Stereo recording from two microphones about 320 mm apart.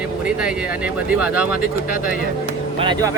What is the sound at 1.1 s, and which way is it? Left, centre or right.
Speech, centre.